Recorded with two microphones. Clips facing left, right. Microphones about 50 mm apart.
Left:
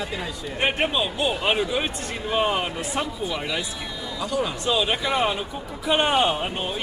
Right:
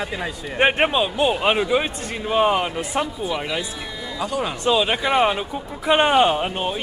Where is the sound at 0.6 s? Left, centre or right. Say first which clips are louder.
Right 5 dB; right.